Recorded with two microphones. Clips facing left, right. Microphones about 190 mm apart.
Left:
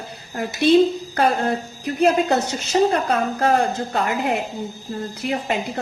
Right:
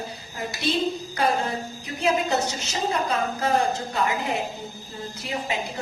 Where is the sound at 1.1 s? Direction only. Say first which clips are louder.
Left 5 dB; 60° left (ahead or behind).